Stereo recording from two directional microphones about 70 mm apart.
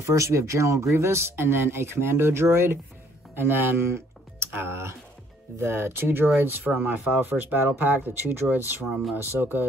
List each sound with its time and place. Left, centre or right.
0.0 s speech: right